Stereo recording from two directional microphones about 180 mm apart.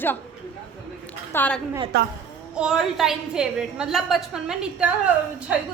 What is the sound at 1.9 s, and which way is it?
Speech, 70° right (ahead or behind).